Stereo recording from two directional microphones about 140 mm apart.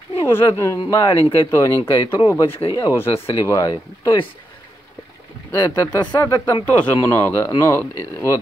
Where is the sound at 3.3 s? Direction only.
25° left (ahead or behind).